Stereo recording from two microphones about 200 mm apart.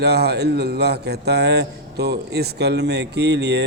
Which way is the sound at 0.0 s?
55° right (ahead or behind).